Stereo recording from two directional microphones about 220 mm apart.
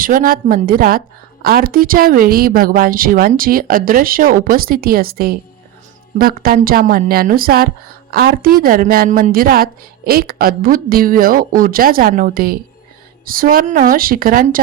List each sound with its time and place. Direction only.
0.0 s a woman's voice: 40° right (ahead or behind)